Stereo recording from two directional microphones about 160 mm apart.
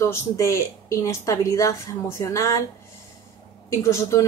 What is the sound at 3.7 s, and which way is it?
Speech, 20° left (ahead or behind).